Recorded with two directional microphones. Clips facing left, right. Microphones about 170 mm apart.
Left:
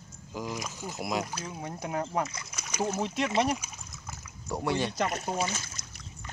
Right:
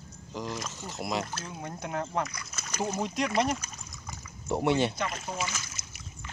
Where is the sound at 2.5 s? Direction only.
10° left (ahead or behind).